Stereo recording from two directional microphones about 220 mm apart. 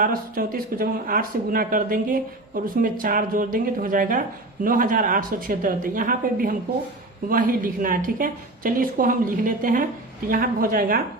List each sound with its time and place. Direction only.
0.0 s speech: 40° right (ahead or behind)